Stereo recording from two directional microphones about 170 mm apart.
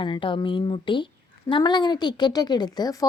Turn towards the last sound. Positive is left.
turn(degrees=20)  # may be behind; listen again after turning